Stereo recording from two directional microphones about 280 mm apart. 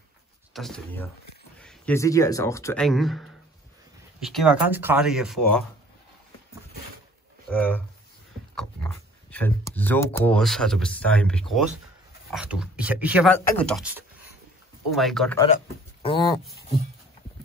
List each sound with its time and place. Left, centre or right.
0.5 s speech: centre
7.4 s speech: centre
15.5 s speech: centre